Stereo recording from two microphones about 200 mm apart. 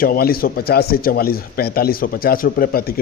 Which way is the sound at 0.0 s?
50° left (ahead or behind).